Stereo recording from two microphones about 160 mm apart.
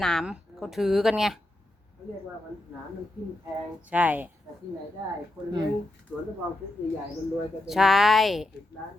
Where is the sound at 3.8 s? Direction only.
10° right (ahead or behind).